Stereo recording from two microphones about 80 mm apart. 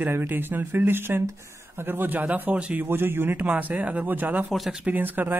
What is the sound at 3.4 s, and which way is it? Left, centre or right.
Speech, centre.